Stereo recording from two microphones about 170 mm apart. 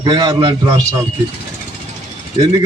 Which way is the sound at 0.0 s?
25° right (ahead or behind).